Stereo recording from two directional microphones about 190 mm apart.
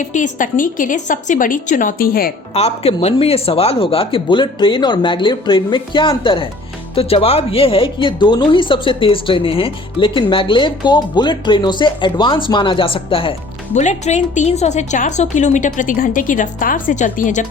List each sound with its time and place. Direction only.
0.0 s a woman's voice: 40° left (ahead or behind)
2.6 s a woman's voice: 30° left (ahead or behind)